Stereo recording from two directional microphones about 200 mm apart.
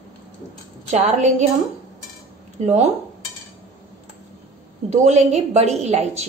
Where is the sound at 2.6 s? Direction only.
35° right (ahead or behind).